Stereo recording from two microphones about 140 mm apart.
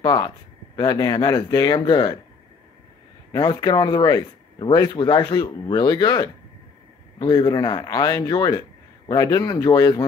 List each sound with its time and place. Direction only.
0.0 s speech: 30° left (ahead or behind)
3.3 s speech: 30° left (ahead or behind)